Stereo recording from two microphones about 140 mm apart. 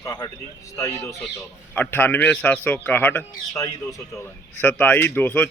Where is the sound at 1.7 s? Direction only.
15° left (ahead or behind).